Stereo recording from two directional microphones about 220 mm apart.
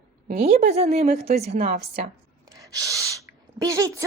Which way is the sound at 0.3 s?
30° right (ahead or behind).